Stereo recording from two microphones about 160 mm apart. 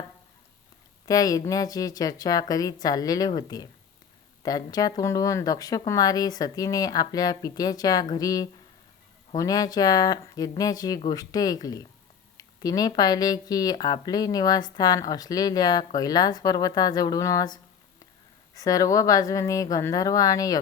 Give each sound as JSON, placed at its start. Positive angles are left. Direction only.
{"t": 1.0, "sound": "speech", "side_deg": 20}